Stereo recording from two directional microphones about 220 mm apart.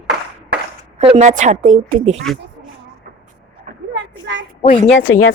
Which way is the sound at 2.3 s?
Centre (ahead or behind).